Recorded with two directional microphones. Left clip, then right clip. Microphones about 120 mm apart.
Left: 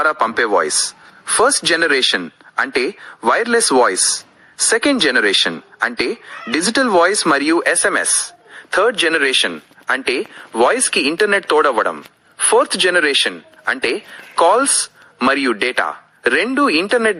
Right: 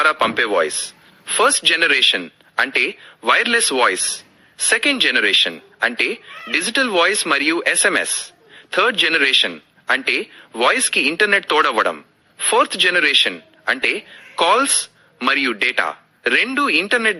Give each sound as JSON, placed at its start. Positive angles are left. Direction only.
{"t": 0.1, "sound": "speech", "side_deg": -15}
{"t": 4.8, "sound": "speech", "side_deg": -10}